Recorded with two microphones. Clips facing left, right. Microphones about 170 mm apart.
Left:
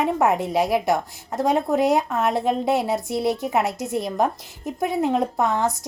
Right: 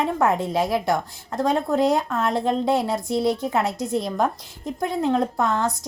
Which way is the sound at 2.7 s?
20° left (ahead or behind).